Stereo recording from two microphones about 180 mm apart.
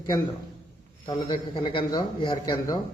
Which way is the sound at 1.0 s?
30° left (ahead or behind).